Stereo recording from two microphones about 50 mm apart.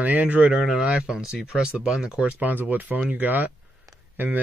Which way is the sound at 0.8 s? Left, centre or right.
Centre.